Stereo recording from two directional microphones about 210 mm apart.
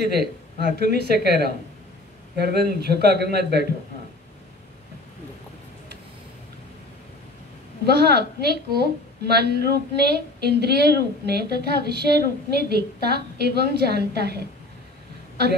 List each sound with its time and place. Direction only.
0.0 s a woman's voice: 50° right (ahead or behind)
7.8 s a woman's voice: 50° right (ahead or behind)